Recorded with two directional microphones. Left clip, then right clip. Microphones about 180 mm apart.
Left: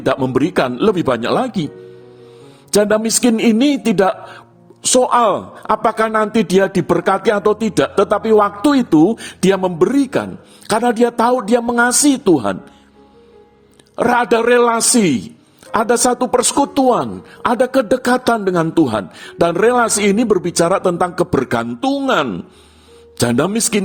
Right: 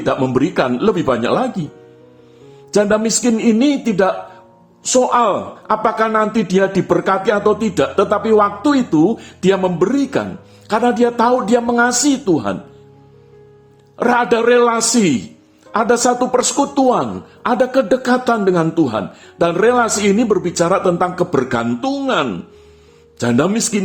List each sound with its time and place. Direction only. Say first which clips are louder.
0.3 s speech: even; 50° left (ahead or behind)
2.7 s a man's voice: left 1 dB; 50° left (ahead or behind)
13.9 s a man's voice: left 1 dB; 40° left (ahead or behind)